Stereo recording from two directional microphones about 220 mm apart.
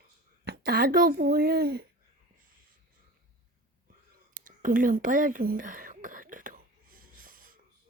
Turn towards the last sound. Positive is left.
turn(degrees=-40)  # may be behind; listen again after turning